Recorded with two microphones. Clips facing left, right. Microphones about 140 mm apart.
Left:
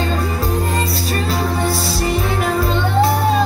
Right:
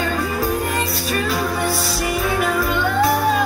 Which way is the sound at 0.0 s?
25° left (ahead or behind).